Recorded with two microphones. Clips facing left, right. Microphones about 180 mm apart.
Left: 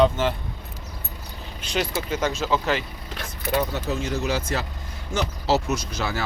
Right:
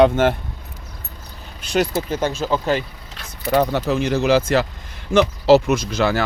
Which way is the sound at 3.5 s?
65° right (ahead or behind).